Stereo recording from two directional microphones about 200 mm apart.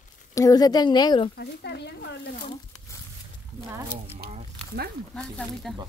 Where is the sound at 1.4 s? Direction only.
55° left (ahead or behind).